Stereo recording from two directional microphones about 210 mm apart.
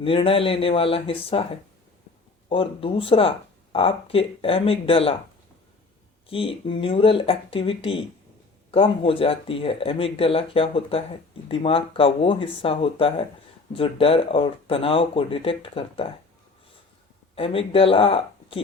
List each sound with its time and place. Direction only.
0.0 s speech: 25° left (ahead or behind)
6.2 s speech: 25° left (ahead or behind)
17.3 s speech: 25° left (ahead or behind)